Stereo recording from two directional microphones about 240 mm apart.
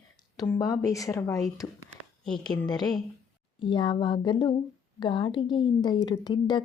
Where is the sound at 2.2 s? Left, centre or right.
Centre.